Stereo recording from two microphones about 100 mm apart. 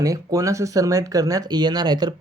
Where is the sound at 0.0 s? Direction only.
35° right (ahead or behind).